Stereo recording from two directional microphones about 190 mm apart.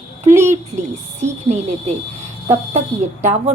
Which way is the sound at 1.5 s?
35° right (ahead or behind).